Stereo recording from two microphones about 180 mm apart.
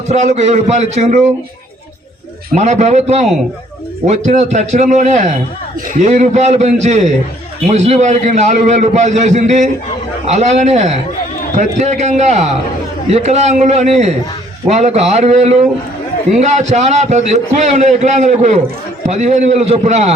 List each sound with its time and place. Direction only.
0.1 s a man's voice: 40° right (ahead or behind)
2.6 s a man's voice: 40° right (ahead or behind)